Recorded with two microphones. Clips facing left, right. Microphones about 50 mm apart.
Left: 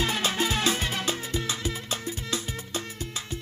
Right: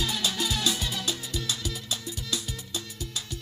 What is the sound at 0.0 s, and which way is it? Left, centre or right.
Music, left.